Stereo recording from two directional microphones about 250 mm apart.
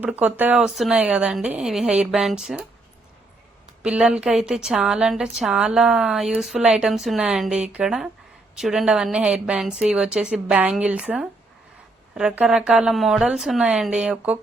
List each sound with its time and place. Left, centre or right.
0.0 s a woman's voice: centre
3.8 s a woman's voice: centre